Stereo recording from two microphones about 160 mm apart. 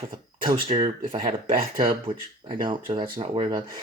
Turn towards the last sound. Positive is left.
turn(degrees=-25)  # may be behind; listen again after turning